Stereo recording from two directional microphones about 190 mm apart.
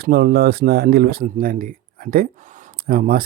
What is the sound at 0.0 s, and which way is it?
Speech, 55° right (ahead or behind).